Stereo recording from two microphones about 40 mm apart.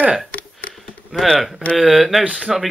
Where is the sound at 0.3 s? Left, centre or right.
Left.